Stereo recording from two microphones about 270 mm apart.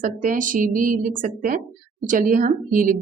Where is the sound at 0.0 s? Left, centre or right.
Right.